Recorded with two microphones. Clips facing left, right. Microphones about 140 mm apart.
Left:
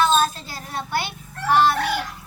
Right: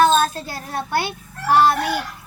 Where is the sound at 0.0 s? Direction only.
50° right (ahead or behind).